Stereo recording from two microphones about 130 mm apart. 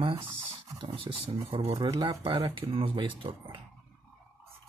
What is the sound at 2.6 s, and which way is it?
Speech, 45° right (ahead or behind).